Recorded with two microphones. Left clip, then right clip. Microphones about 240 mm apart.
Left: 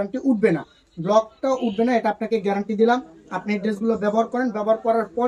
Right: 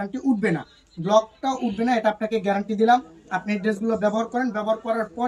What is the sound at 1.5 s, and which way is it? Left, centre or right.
Speech, right.